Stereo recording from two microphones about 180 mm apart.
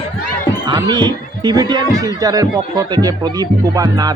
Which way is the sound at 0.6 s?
25° right (ahead or behind).